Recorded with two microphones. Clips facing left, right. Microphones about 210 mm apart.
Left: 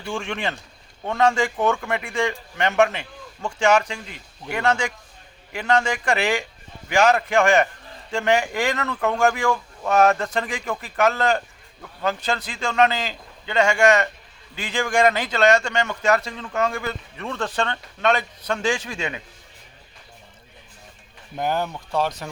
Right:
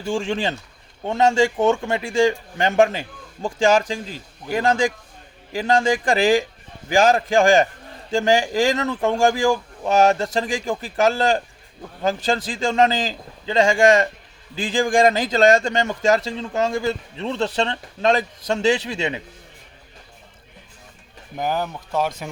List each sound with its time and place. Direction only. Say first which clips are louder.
0.1 s a man's voice: right 5 dB; 30° right (ahead or behind)
21.3 s speech: even; 5° right (ahead or behind)